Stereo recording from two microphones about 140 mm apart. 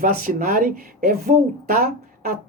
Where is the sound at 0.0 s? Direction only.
80° right.